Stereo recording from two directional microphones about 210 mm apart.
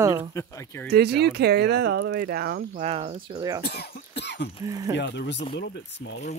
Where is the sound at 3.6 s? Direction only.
50° left (ahead or behind).